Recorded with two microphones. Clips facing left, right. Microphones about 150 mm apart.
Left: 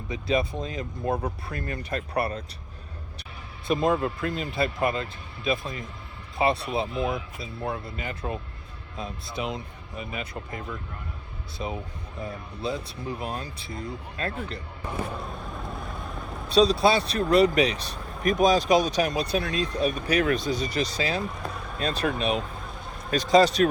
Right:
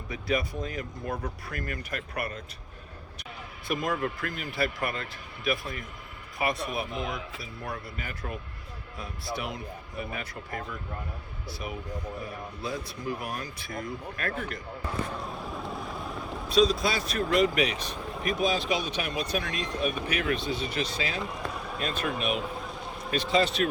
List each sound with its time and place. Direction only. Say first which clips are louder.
0.1 s speech: left 4 dB; 25° left (ahead or behind)
3.7 s speech: left 6 dB; 25° left (ahead or behind)
15.2 s boat: even; centre (ahead or behind)
16.5 s speech: left 4 dB; 30° left (ahead or behind)